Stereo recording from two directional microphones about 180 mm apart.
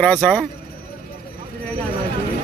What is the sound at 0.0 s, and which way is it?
Speech, 5° left (ahead or behind).